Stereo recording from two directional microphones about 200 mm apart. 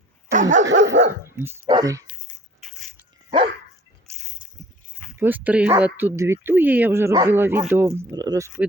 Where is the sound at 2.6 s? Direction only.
Centre (ahead or behind).